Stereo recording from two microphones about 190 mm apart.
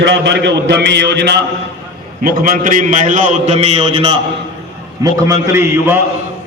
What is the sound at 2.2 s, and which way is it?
A man's voice, 50° right (ahead or behind).